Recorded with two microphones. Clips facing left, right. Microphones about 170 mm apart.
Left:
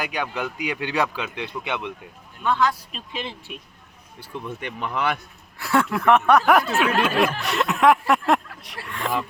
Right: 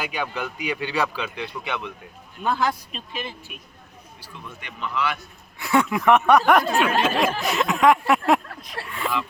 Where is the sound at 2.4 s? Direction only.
30° right (ahead or behind).